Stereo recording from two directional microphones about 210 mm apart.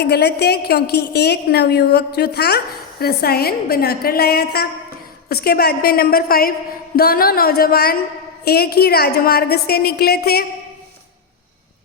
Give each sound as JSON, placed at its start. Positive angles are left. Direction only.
{"t": 0.0, "sound": "a woman's voice", "side_deg": 50}